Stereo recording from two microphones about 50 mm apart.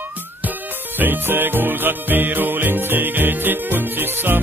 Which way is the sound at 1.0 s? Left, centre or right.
Right.